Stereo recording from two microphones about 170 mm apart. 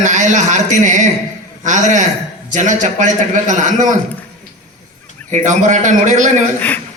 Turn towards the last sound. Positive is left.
turn(degrees=10)  # may be behind; listen again after turning